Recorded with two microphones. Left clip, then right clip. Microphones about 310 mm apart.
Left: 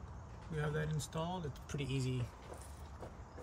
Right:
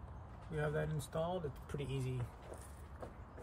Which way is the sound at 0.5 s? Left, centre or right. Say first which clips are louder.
Right 1 dB; centre.